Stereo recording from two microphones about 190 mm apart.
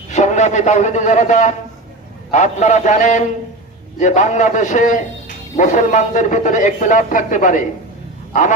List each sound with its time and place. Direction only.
0.1 s a man's voice: 40° left (ahead or behind)
8.3 s wild animals: 40° left (ahead or behind)